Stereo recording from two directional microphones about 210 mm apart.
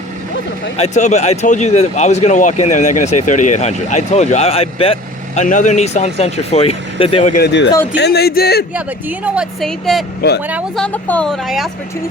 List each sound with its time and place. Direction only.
0.8 s speech: 35° left (ahead or behind)
7.3 s speech: 55° left (ahead or behind)
7.9 s music: 50° left (ahead or behind)
8.7 s speech: 5° right (ahead or behind)
10.2 s music: 50° left (ahead or behind)
10.5 s speech: 5° left (ahead or behind)